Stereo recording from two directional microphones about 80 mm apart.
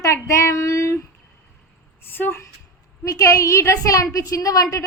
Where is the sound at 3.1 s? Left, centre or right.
Left.